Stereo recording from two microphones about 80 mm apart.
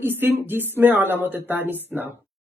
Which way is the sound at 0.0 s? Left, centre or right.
Right.